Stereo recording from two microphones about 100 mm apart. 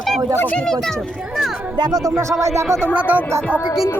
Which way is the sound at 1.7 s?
40° right (ahead or behind).